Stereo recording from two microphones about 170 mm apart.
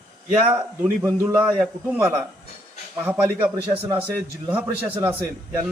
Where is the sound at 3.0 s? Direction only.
10° right (ahead or behind).